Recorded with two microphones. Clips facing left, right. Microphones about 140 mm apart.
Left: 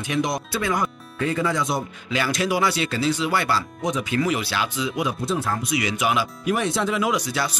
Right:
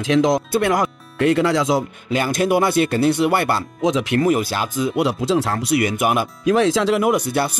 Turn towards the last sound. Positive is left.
turn(degrees=-55)  # may be behind; listen again after turning